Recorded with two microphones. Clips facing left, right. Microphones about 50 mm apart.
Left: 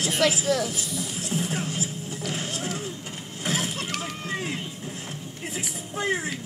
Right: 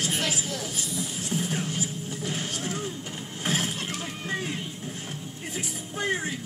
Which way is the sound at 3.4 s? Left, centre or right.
Centre.